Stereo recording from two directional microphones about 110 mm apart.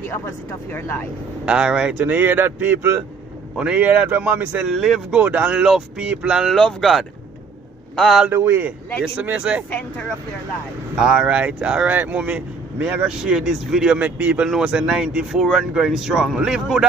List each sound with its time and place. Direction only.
0.7 s speech: 20° left (ahead or behind)
1.4 s speech: 10° right (ahead or behind)
8.3 s a man's voice: 20° right (ahead or behind)
9.7 s speech: 10° left (ahead or behind)
11.0 s speech: 5° right (ahead or behind)